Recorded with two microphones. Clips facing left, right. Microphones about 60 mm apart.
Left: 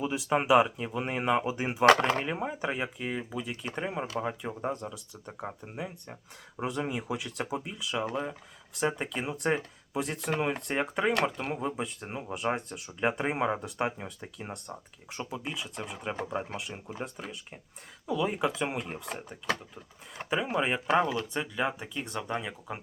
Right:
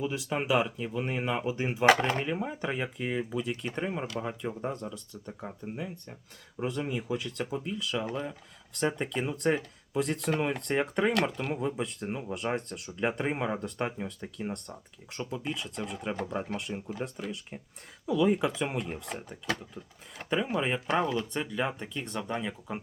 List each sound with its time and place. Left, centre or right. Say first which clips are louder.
0.0 s speech: left 3 dB; centre
1.9 s speech: left 1 dB; centre
2.2 s speech: even; centre
5.2 s speech: left 1 dB; centre
18.0 s speech: right 3 dB; centre